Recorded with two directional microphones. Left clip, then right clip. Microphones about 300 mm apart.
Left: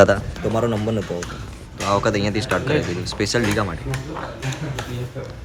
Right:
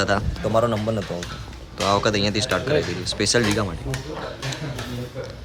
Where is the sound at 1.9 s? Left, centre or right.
Centre.